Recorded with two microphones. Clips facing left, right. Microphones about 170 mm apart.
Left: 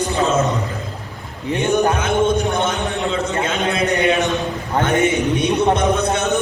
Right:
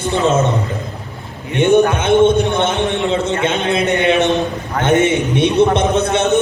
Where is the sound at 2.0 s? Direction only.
30° right (ahead or behind).